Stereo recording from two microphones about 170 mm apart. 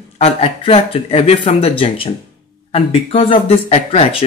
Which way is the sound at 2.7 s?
35° left (ahead or behind).